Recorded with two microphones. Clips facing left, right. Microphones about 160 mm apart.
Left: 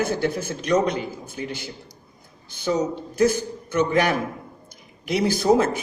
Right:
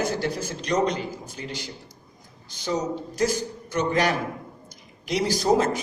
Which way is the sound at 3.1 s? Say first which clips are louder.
Left 6 dB; 55° left (ahead or behind).